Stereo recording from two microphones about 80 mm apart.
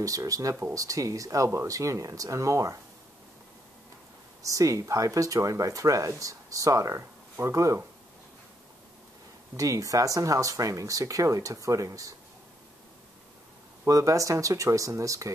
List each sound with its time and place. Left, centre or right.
0.0 s speech: right
4.4 s speech: right
7.0 s speech: right
9.6 s speech: right
13.8 s speech: right